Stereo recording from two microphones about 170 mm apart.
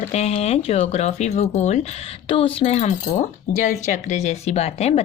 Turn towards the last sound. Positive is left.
turn(degrees=40)  # may be behind; listen again after turning